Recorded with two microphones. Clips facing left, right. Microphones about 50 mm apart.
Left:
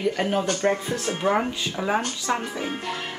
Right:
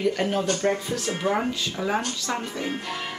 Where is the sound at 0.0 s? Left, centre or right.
Centre.